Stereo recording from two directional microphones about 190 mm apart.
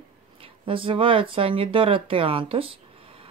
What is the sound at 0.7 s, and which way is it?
Speech, 30° right (ahead or behind).